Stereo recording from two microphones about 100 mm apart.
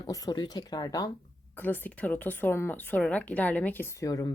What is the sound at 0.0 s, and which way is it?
Speech, 45° left (ahead or behind).